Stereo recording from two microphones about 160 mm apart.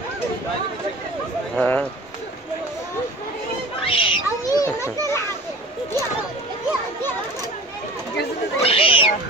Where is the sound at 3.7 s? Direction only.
35° left (ahead or behind).